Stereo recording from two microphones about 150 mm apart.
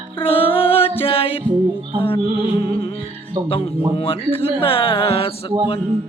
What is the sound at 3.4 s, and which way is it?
Music, 35° left (ahead or behind).